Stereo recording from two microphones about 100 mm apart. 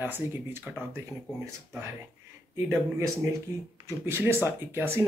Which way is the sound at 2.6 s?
25° right (ahead or behind).